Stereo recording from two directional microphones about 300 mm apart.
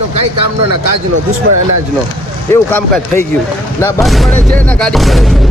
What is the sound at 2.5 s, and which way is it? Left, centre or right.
Speech, centre.